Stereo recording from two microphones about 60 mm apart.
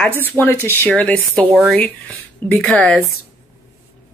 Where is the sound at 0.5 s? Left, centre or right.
Left.